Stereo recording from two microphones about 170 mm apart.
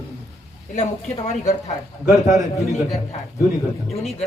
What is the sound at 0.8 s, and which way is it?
Speech, 45° left (ahead or behind).